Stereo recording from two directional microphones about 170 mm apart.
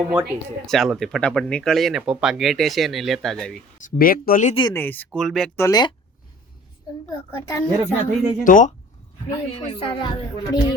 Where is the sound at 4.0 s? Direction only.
60° left (ahead or behind).